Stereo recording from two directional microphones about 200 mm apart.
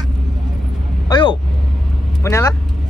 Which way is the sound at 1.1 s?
25° left (ahead or behind).